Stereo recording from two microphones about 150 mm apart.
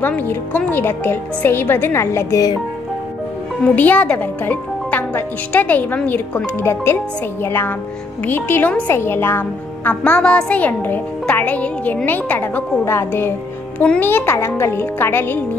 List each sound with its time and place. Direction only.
0.0 s a woman's voice: 15° left (ahead or behind)
3.6 s a woman's voice: 10° left (ahead or behind)